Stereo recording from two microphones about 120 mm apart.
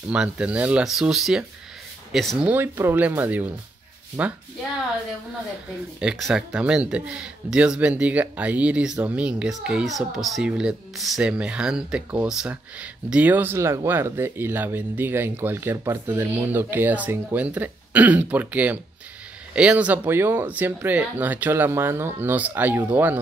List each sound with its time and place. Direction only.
0.1 s speech: 10° right (ahead or behind)
2.4 s speech: 15° right (ahead or behind)
5.9 s speech: 5° right (ahead or behind)